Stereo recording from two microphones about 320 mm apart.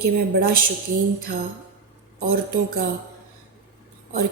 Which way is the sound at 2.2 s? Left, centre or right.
Right.